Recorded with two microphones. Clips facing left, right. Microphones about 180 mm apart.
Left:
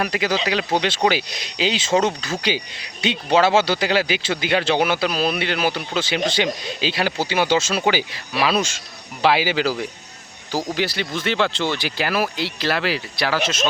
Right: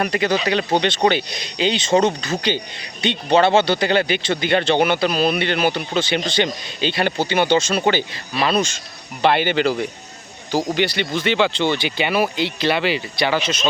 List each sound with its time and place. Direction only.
0.0 s speech: 5° left (ahead or behind)